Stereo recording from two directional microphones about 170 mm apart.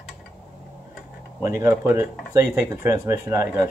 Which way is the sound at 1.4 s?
15° right (ahead or behind).